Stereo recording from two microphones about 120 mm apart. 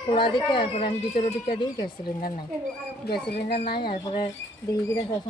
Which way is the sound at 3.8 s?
45° left (ahead or behind).